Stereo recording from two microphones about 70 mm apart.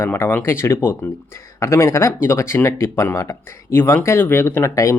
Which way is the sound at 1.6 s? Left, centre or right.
Left.